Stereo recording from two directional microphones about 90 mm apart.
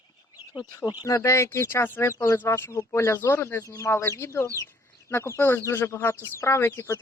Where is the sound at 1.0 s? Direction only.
35° left (ahead or behind).